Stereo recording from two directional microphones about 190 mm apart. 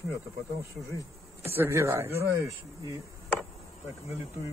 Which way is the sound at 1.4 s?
10° right (ahead or behind).